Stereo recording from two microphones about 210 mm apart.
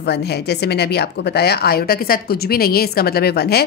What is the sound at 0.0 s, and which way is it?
A woman's voice, 50° left (ahead or behind).